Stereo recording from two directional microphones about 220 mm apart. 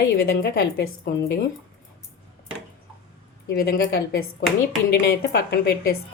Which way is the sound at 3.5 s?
45° left (ahead or behind).